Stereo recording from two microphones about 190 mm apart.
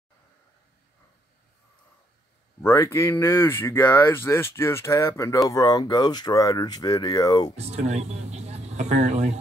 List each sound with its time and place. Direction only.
2.6 s speech: 15° left (ahead or behind)
7.5 s speech: 35° right (ahead or behind)